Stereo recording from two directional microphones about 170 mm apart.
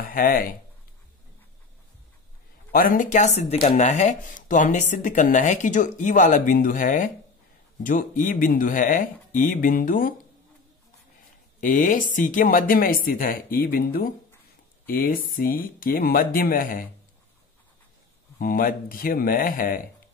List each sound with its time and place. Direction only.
0.0 s speech: 60° left (ahead or behind)
2.7 s speech: 55° left (ahead or behind)
11.6 s speech: 50° left (ahead or behind)
18.4 s speech: 60° left (ahead or behind)